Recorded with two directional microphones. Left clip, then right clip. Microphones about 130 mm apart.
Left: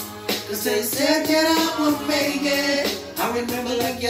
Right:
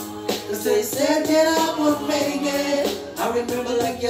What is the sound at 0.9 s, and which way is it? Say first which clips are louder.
Music: left 1 dB; 40° right (ahead or behind).